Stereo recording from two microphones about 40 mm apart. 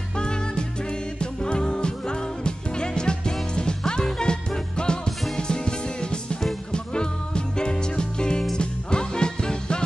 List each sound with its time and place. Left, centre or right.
0.2 s music: left